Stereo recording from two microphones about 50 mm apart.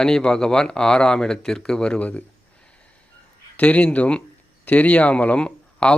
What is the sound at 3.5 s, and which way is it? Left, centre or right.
Speech, left.